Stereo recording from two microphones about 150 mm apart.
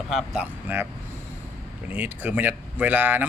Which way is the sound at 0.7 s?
15° right (ahead or behind).